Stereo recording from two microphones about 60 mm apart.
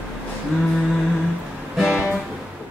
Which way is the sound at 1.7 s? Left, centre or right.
Centre.